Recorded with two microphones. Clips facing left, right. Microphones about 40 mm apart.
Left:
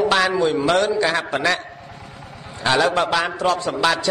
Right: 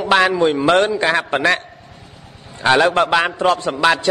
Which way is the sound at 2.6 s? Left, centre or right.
Right.